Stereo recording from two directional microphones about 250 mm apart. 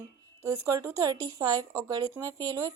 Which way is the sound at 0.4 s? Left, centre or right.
Centre.